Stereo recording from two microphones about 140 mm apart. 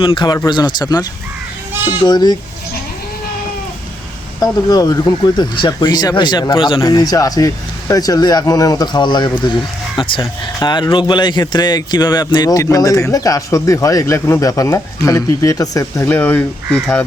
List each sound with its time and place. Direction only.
0.0 s speech: 35° left (ahead or behind)
2.0 s speech: 30° left (ahead or behind)
4.7 s speech: 25° left (ahead or behind)
6.8 s speech: 25° left (ahead or behind)
16.0 s speech: 15° left (ahead or behind)